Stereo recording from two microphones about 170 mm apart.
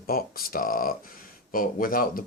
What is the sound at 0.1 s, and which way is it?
Speech, 60° left (ahead or behind).